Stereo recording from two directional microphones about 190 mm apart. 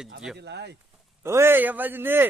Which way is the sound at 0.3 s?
60° right (ahead or behind).